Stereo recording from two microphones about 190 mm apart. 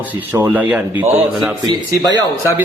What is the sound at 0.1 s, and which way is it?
A man's voice, 10° right (ahead or behind).